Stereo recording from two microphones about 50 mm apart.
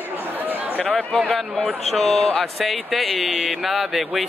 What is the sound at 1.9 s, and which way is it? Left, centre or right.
Speech, centre.